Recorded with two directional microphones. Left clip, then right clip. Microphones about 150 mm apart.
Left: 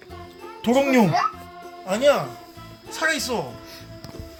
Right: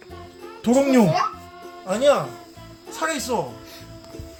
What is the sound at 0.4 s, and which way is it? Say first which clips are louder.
Music: right 1 dB; 5° right (ahead or behind).